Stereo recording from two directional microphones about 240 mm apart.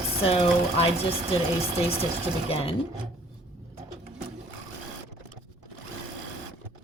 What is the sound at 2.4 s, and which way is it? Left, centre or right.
Speech, left.